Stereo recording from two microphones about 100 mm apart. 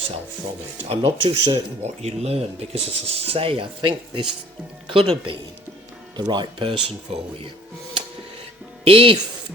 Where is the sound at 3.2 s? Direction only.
65° right (ahead or behind).